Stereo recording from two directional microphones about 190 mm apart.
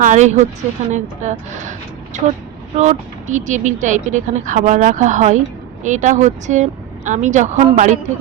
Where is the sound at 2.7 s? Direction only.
35° right (ahead or behind).